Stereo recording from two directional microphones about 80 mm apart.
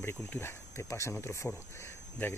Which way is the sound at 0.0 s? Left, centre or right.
Left.